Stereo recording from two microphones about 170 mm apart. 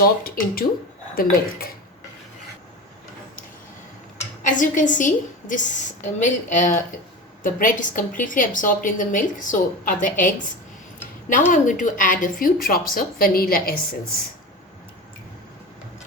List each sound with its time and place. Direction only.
0.0 s a woman's voice: 60° left (ahead or behind)
4.4 s a woman's voice: 50° left (ahead or behind)
11.3 s a woman's voice: 50° left (ahead or behind)